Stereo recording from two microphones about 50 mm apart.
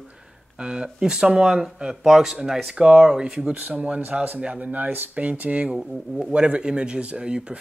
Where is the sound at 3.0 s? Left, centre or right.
Centre.